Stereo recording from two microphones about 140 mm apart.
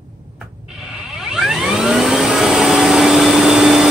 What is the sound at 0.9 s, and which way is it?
Vehicle, 5° right (ahead or behind).